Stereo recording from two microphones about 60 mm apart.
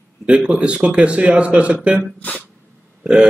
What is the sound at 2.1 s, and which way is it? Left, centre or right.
Speech, left.